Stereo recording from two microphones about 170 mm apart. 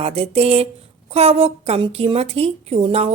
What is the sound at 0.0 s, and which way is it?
A woman's voice, 35° right (ahead or behind).